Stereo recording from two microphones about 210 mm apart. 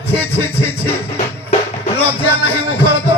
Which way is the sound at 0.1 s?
10° left (ahead or behind).